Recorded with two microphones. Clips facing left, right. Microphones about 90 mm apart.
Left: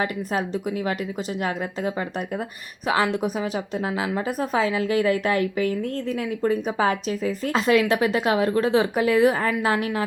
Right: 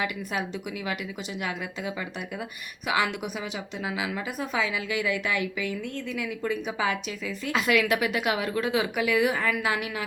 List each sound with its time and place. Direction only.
0.0 s a woman's voice: 40° left (ahead or behind)